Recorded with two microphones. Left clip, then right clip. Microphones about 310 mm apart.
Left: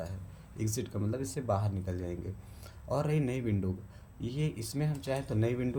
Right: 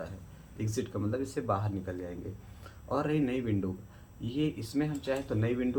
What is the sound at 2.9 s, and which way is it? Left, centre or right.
Speech, left.